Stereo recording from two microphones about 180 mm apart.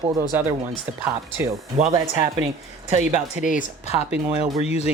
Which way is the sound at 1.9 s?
30° right (ahead or behind).